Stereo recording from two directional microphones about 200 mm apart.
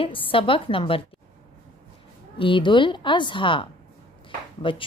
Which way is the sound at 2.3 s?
25° left (ahead or behind).